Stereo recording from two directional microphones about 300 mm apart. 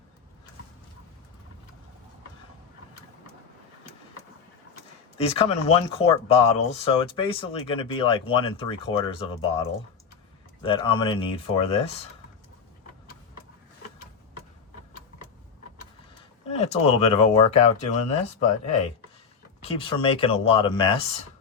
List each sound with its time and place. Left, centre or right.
5.1 s speech: centre
10.6 s speech: centre
16.6 s speech: centre